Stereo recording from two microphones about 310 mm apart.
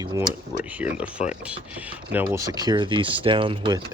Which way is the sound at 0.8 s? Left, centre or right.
Centre.